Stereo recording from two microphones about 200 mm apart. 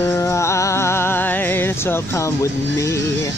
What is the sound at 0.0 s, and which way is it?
Music, 10° left (ahead or behind).